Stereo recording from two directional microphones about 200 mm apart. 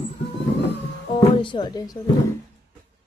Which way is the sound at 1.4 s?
25° left (ahead or behind).